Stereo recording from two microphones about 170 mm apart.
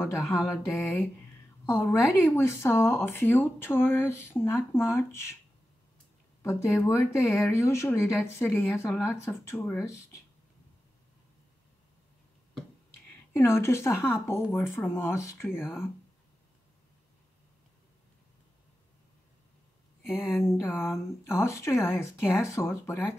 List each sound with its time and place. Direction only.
0.4 s mantra: 5° right (ahead or behind)
0.7 s speech: 10° left (ahead or behind)
6.4 s speech: 15° left (ahead or behind)
13.3 s speech: 15° left (ahead or behind)
20.1 s speech: 15° left (ahead or behind)